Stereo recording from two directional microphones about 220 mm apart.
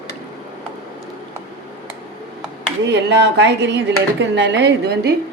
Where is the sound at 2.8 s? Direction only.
50° right (ahead or behind).